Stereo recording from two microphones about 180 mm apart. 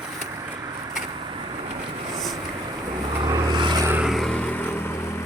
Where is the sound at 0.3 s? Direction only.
20° right (ahead or behind).